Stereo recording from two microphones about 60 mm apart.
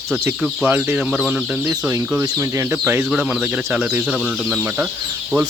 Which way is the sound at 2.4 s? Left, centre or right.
Right.